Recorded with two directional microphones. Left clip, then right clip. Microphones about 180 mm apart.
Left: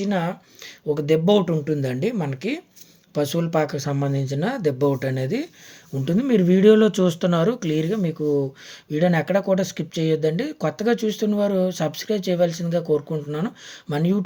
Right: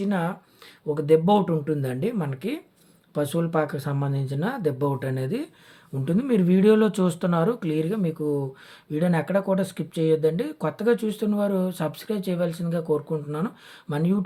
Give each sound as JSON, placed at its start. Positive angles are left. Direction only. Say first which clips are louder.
{"t": 0.0, "sound": "speech", "louder": "left 3 dB", "side_deg": 15}